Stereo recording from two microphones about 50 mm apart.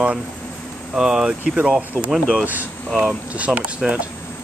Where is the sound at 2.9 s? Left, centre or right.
Centre.